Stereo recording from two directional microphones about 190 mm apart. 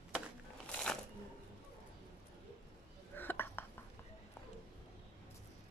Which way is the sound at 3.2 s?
10° left (ahead or behind).